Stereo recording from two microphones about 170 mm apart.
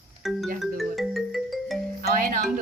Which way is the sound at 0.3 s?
Centre (ahead or behind).